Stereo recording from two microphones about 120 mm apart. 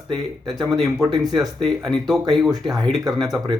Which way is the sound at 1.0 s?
35° right (ahead or behind).